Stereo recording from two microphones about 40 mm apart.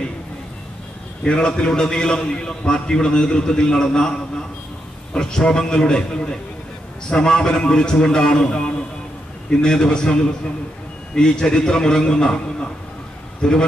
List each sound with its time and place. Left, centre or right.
1.2 s a man's voice: left
5.1 s a man's voice: centre
11.1 s a man's voice: centre